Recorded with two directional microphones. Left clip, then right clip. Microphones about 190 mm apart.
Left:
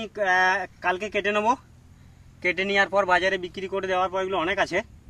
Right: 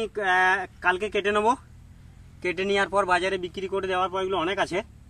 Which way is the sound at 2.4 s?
15° left (ahead or behind).